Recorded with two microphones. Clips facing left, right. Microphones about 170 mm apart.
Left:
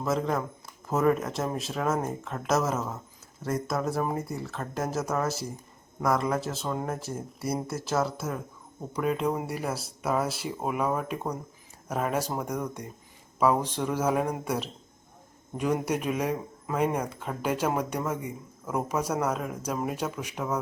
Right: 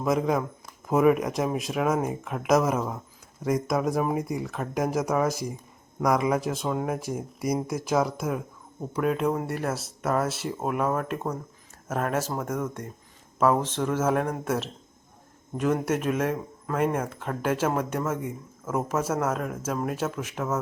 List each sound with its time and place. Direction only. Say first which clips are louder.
0.0 s speech: right 3 dB; 15° right (ahead or behind)
8.9 s speech: right 2 dB; centre (ahead or behind)